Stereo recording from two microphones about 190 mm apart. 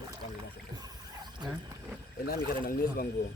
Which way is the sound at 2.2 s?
50° left (ahead or behind).